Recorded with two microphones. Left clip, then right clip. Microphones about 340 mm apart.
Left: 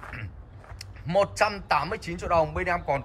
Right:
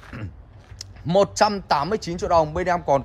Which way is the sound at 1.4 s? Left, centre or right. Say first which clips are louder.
Right 5 dB; right.